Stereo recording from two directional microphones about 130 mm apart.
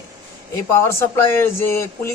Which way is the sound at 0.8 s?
20° left (ahead or behind).